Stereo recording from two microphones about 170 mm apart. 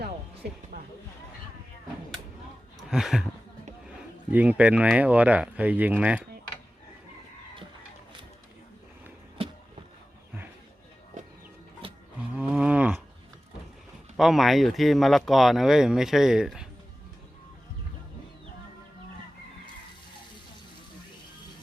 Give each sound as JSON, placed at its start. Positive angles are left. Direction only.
{"t": 0.7, "sound": "a sound", "side_deg": -70}
{"t": 2.9, "sound": "speech", "side_deg": -5}
{"t": 4.3, "sound": "speech", "side_deg": -10}
{"t": 12.3, "sound": "cattle", "side_deg": -5}
{"t": 14.2, "sound": "speech", "side_deg": 0}